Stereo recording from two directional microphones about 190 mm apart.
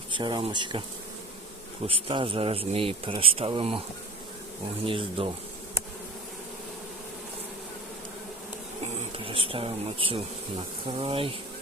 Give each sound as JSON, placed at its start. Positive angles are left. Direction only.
{"t": 0.1, "sound": "speech", "side_deg": -25}
{"t": 1.9, "sound": "speech", "side_deg": -30}
{"t": 4.9, "sound": "speech", "side_deg": -30}
{"t": 9.0, "sound": "speech", "side_deg": -30}